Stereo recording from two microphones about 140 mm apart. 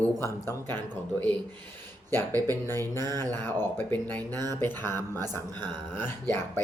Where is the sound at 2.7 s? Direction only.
15° left (ahead or behind).